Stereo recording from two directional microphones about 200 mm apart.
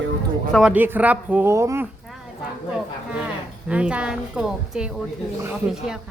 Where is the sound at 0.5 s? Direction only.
5° right (ahead or behind).